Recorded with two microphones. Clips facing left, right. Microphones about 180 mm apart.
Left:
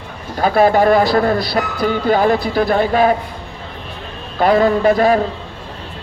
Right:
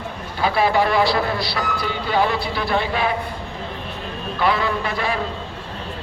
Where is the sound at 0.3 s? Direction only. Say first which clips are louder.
Left 6 dB; 45° left (ahead or behind).